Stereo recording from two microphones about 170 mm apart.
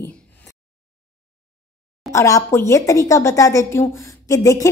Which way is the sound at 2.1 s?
20° left (ahead or behind).